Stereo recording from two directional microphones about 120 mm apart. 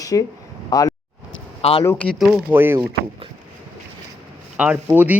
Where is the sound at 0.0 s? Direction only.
30° left (ahead or behind).